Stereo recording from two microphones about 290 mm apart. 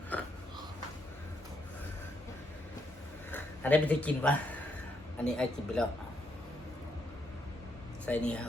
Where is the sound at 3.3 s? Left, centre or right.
Centre.